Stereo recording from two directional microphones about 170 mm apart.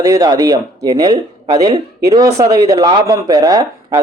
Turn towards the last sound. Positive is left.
turn(degrees=-20)  # may be behind; listen again after turning